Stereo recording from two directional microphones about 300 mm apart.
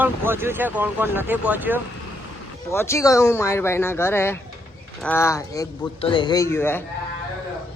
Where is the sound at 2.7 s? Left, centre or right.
Centre.